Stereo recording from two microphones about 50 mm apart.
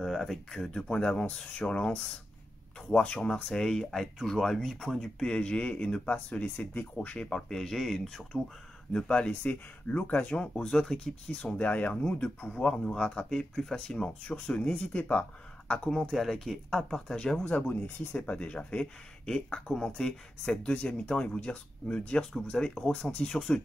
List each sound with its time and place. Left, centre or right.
0.0 s speech: centre
0.8 s speech: centre
5.2 s speech: centre
7.2 s speech: centre
8.9 s speech: centre
9.3 s speech: left
10.3 s speech: centre
11.2 s speech: left
12.6 s speech: centre
14.2 s speech: left
16.1 s speech: centre
17.6 s speech: left
18.1 s speech: left
20.4 s speech: left